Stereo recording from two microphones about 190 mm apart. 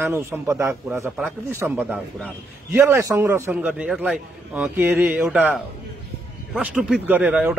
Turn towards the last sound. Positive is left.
turn(degrees=-5)  # may be behind; listen again after turning